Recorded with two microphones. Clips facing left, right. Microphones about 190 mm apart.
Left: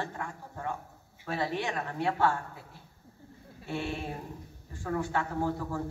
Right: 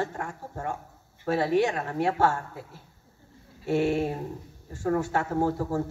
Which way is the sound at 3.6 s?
40° right (ahead or behind).